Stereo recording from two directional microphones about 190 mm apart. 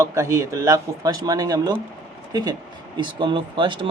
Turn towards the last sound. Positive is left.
turn(degrees=-25)  # may be behind; listen again after turning